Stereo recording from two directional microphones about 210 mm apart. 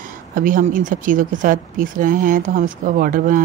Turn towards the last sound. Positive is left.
turn(degrees=-40)  # may be behind; listen again after turning